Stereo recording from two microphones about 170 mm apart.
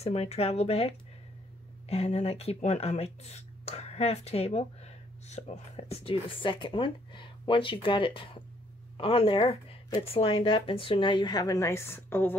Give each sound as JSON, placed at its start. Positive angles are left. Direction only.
{"t": 0.0, "sound": "a woman's voice", "side_deg": 40}